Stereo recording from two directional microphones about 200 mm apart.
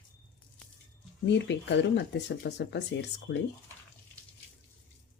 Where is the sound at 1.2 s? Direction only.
60° left (ahead or behind).